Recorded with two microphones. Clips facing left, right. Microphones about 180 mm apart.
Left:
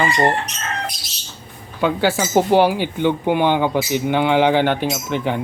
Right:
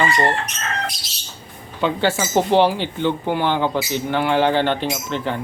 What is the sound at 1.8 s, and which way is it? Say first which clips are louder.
Speech: left 2 dB; 10° left (ahead or behind).